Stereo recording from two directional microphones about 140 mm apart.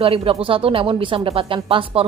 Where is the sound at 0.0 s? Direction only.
40° right (ahead or behind).